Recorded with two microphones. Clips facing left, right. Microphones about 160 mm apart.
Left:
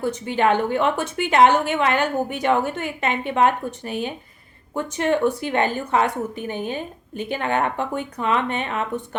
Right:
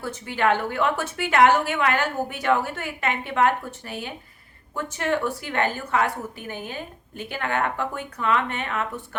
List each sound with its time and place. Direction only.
0.0 s a woman's voice: 20° left (ahead or behind)